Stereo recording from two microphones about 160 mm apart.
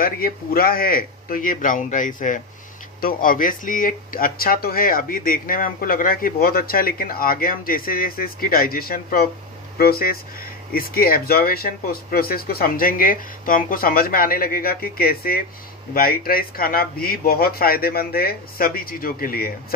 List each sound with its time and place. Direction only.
0.0 s speech: 65° left (ahead or behind)